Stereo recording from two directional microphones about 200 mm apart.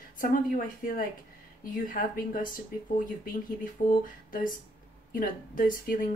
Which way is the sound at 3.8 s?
35° left (ahead or behind).